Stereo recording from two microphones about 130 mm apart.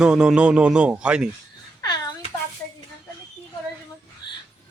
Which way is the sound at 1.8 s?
30° left (ahead or behind).